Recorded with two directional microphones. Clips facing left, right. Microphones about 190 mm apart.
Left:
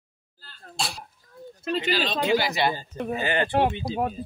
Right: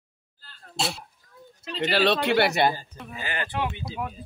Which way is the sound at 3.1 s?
25° left (ahead or behind).